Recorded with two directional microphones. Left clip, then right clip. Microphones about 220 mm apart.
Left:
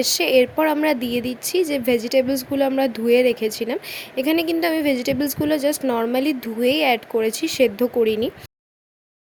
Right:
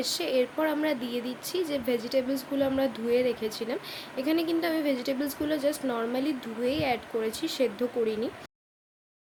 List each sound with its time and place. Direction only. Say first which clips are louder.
0.0 s speech: left 10 dB; 40° left (ahead or behind)